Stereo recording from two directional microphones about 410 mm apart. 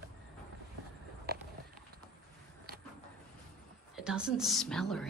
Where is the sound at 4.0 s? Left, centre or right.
Centre.